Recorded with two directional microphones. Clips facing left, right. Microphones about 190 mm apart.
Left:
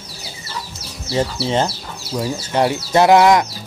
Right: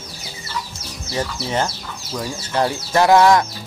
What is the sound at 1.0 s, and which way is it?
Speech, 30° left (ahead or behind).